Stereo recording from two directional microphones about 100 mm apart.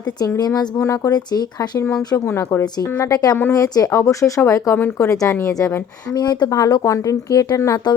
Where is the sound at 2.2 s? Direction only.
25° left (ahead or behind).